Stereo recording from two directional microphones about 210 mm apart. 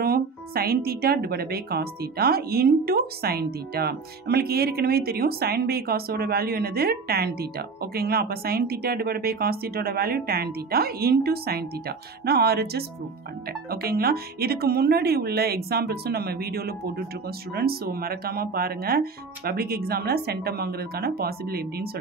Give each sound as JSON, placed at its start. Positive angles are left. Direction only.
{"t": 0.0, "sound": "speech", "side_deg": -45}